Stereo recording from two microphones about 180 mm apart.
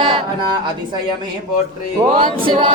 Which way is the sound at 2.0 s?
30° right (ahead or behind).